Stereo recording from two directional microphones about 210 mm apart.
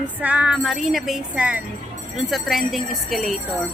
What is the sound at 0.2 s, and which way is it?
Music, 5° right (ahead or behind).